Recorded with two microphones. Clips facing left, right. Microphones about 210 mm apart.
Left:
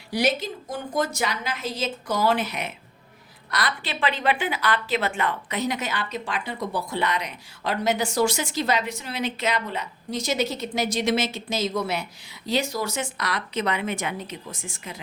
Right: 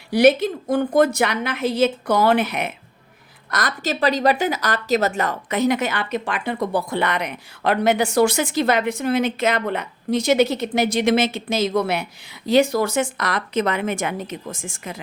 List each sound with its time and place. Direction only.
0.1 s speech: 55° right (ahead or behind)
3.5 s speech: 45° right (ahead or behind)